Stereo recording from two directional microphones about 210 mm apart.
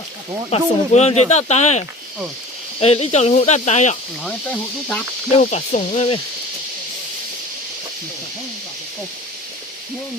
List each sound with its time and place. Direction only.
0.5 s speech: 30° left (ahead or behind)
2.8 s speech: 30° left (ahead or behind)
5.3 s speech: 35° left (ahead or behind)